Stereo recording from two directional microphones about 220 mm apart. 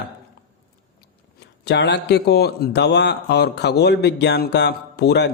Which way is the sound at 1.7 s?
50° left (ahead or behind).